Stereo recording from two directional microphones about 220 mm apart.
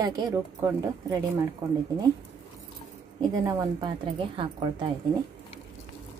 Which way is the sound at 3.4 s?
20° right (ahead or behind).